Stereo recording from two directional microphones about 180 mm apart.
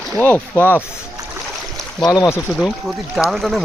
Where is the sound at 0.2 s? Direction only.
10° left (ahead or behind).